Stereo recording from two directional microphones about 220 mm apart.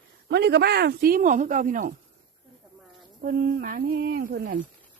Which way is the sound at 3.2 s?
40° right (ahead or behind).